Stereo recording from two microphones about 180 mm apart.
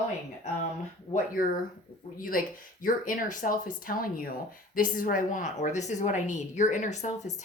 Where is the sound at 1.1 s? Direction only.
50° left (ahead or behind).